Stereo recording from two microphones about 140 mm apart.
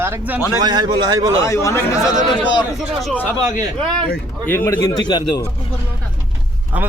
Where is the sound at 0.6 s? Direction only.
30° right (ahead or behind).